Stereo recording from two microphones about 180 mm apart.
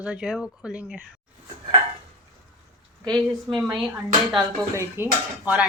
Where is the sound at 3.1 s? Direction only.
Centre (ahead or behind).